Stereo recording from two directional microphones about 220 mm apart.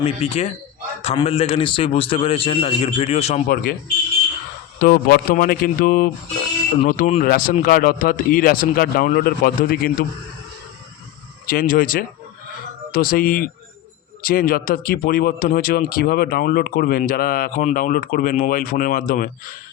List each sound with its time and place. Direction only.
0.0 s a man's voice: 30° left (ahead or behind)
3.4 s speech: 40° left (ahead or behind)
4.8 s speech: 40° left (ahead or behind)
11.4 s speech: 40° left (ahead or behind)